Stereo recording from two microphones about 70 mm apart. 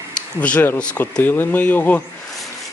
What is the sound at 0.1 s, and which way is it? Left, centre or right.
Speech, centre.